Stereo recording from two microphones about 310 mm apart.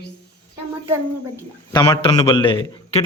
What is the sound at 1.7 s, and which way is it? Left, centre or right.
A man's voice, centre.